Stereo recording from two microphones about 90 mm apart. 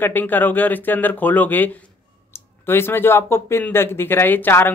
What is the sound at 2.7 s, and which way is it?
Speech, 25° left (ahead or behind).